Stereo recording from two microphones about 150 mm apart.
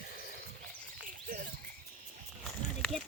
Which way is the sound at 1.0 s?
65° right (ahead or behind).